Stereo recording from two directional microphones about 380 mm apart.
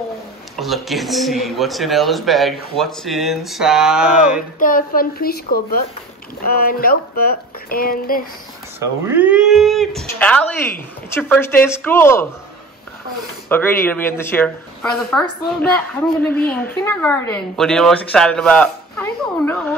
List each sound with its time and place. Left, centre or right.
0.6 s speech: centre
4.6 s speech: left
8.7 s speech: centre
13.5 s speech: centre